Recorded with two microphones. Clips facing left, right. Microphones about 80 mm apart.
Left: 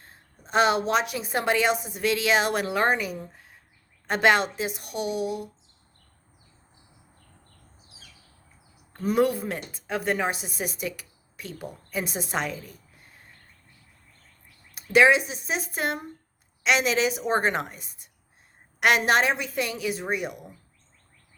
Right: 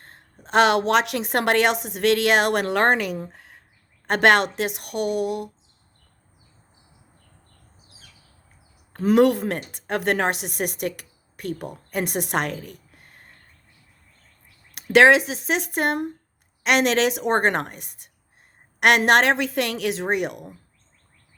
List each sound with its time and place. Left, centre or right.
0.4 s a woman's voice: right
9.0 s speech: right
14.7 s a woman's voice: right